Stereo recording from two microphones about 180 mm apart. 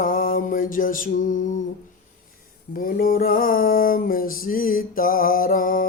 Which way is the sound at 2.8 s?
55° left (ahead or behind).